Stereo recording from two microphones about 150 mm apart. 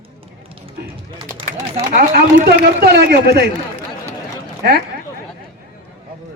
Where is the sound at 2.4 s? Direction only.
75° right (ahead or behind); by 3.4 s 90° right.